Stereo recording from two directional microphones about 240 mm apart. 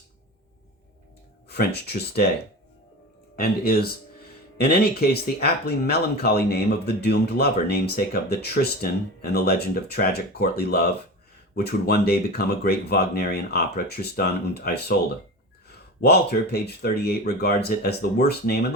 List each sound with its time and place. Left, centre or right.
1.5 s speech: left
3.4 s speech: left